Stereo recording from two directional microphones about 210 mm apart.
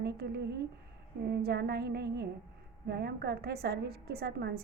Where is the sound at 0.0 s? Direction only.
50° right (ahead or behind).